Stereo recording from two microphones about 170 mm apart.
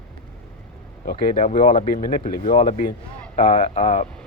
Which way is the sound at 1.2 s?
55° left (ahead or behind).